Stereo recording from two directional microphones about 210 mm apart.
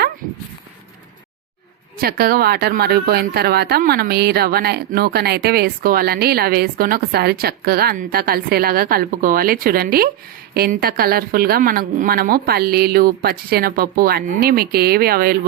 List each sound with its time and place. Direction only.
2.0 s a woman's voice: 45° right (ahead or behind)